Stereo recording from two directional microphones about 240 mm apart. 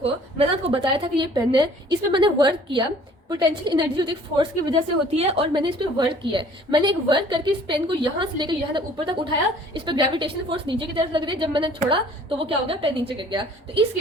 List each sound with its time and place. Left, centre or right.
0.0 s a woman's voice: right